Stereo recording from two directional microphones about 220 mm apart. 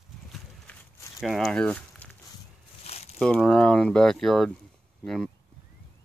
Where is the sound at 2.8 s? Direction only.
25° left (ahead or behind).